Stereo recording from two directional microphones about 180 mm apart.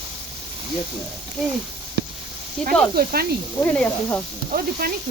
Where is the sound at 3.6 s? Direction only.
10° left (ahead or behind).